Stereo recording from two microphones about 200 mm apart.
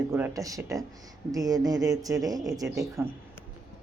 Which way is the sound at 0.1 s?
15° right (ahead or behind).